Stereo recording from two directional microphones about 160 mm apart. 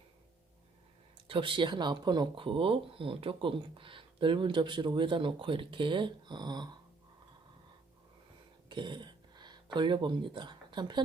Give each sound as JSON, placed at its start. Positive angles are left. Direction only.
{"t": 1.3, "sound": "speech", "side_deg": -30}
{"t": 8.7, "sound": "a sound", "side_deg": -30}
{"t": 9.7, "sound": "speech", "side_deg": -30}